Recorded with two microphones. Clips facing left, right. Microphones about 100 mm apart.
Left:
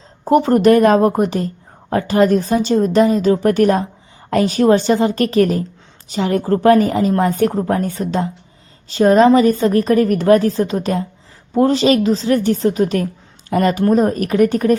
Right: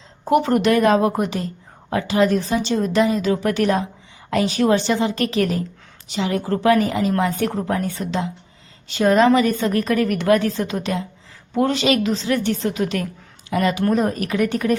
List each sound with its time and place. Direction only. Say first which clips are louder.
0.3 s a woman's voice: left 5 dB; 35° left (ahead or behind)